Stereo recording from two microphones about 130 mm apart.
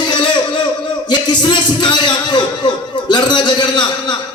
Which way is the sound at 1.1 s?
35° left (ahead or behind).